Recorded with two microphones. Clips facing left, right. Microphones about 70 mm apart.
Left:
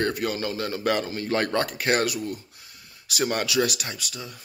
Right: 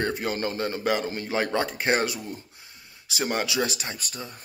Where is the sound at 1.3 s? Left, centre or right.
Centre.